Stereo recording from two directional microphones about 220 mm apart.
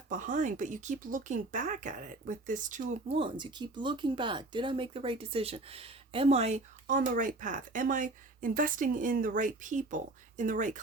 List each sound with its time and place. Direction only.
0.1 s a woman's voice: 35° right (ahead or behind)